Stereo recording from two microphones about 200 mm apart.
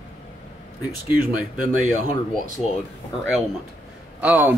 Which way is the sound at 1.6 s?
40° right (ahead or behind).